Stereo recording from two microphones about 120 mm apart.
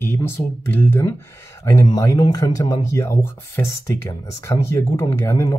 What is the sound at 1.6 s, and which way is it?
Speech, 25° left (ahead or behind).